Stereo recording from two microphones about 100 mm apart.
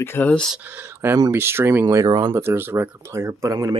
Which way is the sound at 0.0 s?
25° left (ahead or behind).